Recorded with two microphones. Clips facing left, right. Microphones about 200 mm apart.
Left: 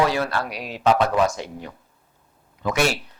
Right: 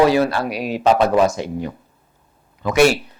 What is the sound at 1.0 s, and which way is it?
Speech, 25° right (ahead or behind).